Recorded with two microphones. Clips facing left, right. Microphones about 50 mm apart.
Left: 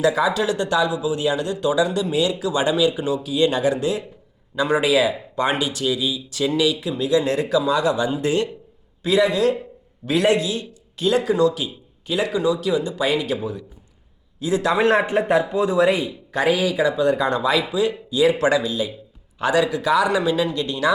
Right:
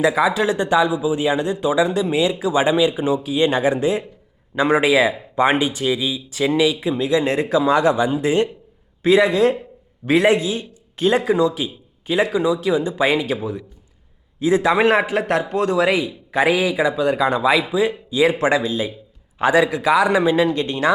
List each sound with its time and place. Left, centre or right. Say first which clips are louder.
0.0 s speech: right 2 dB; centre; by 7.9 s right
7.9 s speech: right 3 dB; centre
9.0 s speech: right 3 dB; right
11.3 s speech: right 1 dB; centre
15.5 s speech: even; right
16.3 s speech: right 2 dB; centre; by 20.9 s right